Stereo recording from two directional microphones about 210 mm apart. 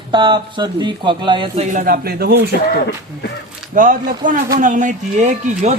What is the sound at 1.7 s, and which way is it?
Speech, 40° right (ahead or behind).